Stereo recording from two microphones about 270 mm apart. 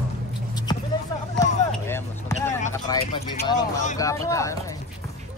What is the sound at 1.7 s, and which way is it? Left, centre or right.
Basketball bounce, centre.